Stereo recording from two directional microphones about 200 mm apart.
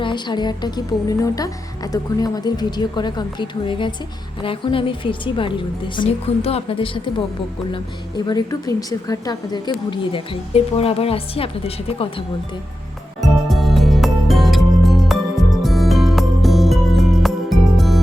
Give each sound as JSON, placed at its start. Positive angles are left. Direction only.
{"t": 0.0, "sound": "speech", "side_deg": 25}
{"t": 13.5, "sound": "music", "side_deg": 0}